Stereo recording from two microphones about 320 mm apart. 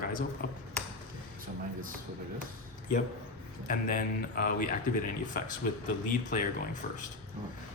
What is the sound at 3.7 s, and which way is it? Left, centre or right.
Speech, left.